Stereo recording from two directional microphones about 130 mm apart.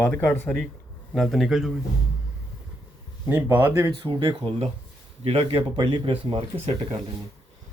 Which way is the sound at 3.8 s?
35° right (ahead or behind).